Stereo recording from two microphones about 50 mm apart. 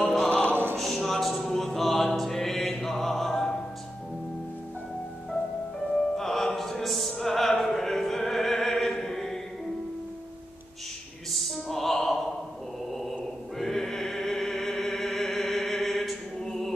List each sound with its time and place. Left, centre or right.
0.0 s music: centre
0.3 s music: left
0.7 s music: centre
5.9 s opera: centre
11.3 s opera: centre
13.6 s music: centre